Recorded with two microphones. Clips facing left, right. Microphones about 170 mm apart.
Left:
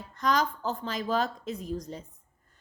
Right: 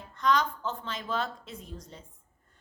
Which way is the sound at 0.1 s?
40° left (ahead or behind).